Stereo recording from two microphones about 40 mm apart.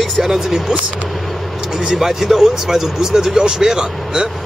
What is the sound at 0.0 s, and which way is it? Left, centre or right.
Speech, centre.